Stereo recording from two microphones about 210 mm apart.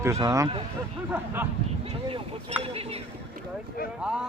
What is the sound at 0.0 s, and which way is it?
Speech, 15° right (ahead or behind).